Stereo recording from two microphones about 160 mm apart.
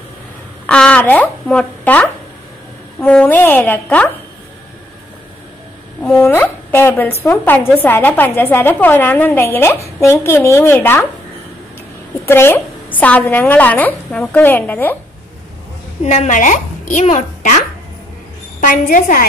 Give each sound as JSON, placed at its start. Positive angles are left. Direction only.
{"t": 0.7, "sound": "a woman's voice", "side_deg": 5}
{"t": 6.1, "sound": "a woman's voice", "side_deg": 15}
{"t": 12.3, "sound": "a woman's voice", "side_deg": 15}
{"t": 16.0, "sound": "a child's voice", "side_deg": 45}